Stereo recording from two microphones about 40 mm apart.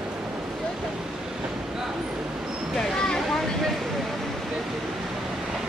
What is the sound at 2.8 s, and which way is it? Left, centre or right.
Speech, centre.